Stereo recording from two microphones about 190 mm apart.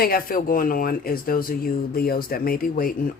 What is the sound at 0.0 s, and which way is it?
Speech, 50° left (ahead or behind).